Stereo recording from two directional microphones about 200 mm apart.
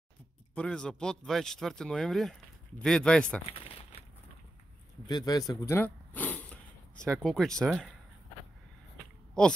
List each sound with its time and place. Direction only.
0.6 s speech: 5° left (ahead or behind)
3.5 s crumpling: 25° left (ahead or behind)
5.0 s speech: 20° left (ahead or behind); by 7.9 s centre (ahead or behind)